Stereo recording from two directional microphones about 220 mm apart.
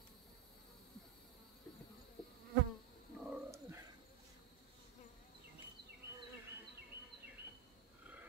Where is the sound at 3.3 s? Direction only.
10° right (ahead or behind).